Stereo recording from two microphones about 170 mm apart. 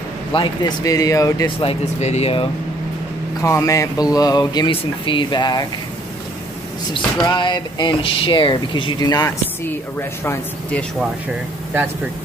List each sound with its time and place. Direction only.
0.3 s speech: 25° left (ahead or behind)
1.6 s speech: 35° left (ahead or behind)
3.4 s speech: 20° left (ahead or behind)
6.9 s speech: 25° left (ahead or behind); by 10.9 s 10° left (ahead or behind)